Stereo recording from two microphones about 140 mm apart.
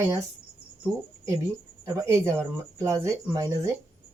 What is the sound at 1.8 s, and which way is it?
Speech, 20° right (ahead or behind).